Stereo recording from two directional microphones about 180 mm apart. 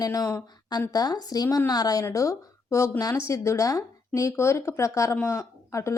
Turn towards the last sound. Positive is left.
turn(degrees=15)  # may be behind; listen again after turning